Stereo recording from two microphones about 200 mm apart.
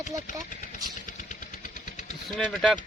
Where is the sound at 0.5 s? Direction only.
40° left (ahead or behind).